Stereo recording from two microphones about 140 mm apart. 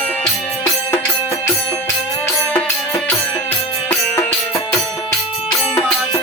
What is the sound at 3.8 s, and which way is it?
Music, 20° left (ahead or behind).